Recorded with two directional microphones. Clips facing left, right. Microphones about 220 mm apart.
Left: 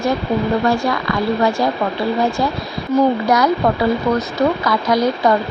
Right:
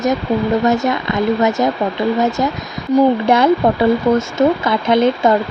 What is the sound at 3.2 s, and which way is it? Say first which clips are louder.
Speech: right 3 dB; 25° right (ahead or behind).